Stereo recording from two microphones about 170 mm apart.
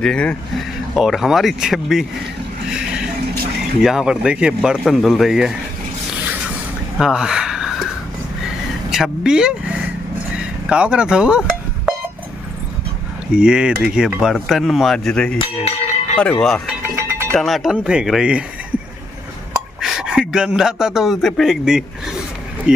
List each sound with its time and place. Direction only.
0.0 s speech: 5° left (ahead or behind)
3.8 s speech: 5° right (ahead or behind)
7.0 s a sound: 5° right (ahead or behind)
8.9 s speech: 5° right (ahead or behind)
10.3 s a sound: 5° right (ahead or behind)
13.3 s speech: 5° right (ahead or behind)
15.3 s speech: 40° left (ahead or behind)
16.2 s speech: 5° left (ahead or behind)
16.8 s a sound: 15° right (ahead or behind)
17.3 s speech: centre (ahead or behind)
19.8 s speech: 5° right (ahead or behind)